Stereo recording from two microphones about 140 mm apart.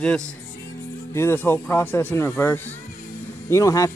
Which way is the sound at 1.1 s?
20° left (ahead or behind).